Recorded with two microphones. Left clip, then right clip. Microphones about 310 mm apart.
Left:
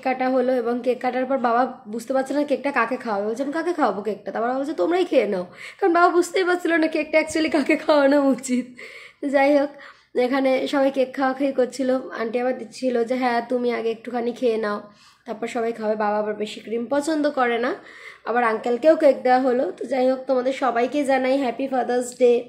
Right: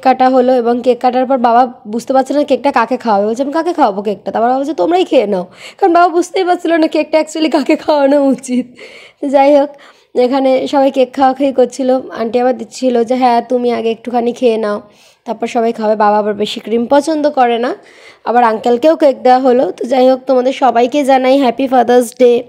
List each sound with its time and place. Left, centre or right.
0.0 s a woman's voice: right